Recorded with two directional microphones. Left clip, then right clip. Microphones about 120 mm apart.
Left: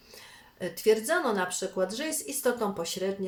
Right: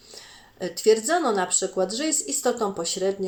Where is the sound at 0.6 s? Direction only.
20° right (ahead or behind).